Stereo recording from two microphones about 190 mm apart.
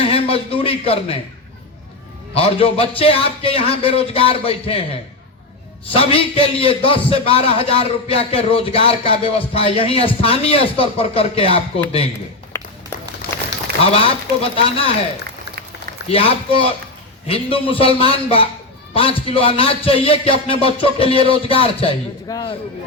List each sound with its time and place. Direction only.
0.0 s a sound: 30° left (ahead or behind)
2.3 s speech: 30° left (ahead or behind)
5.9 s speech: 30° left (ahead or behind)
12.5 s a sound: 15° left (ahead or behind)
13.8 s speech: 30° left (ahead or behind)
16.0 s speech: 30° left (ahead or behind)